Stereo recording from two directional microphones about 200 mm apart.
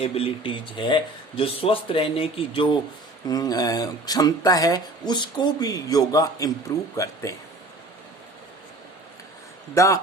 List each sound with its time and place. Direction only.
0.0 s speech: 30° left (ahead or behind)
9.7 s speech: 15° left (ahead or behind)